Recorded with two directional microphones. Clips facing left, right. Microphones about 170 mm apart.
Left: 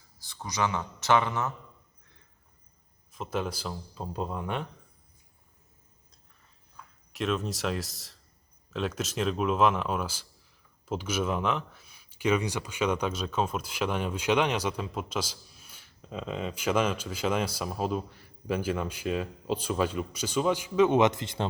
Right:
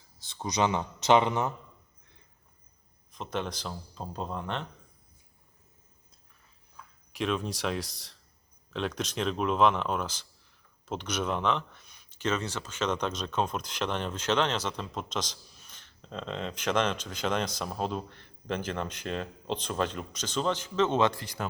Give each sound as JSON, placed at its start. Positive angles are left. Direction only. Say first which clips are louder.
{"t": 0.2, "sound": "a man's voice", "louder": "right 2 dB", "side_deg": -20}
{"t": 3.1, "sound": "speech", "louder": "left 2 dB", "side_deg": 5}
{"t": 7.1, "sound": "speech", "louder": "left 1 dB", "side_deg": 0}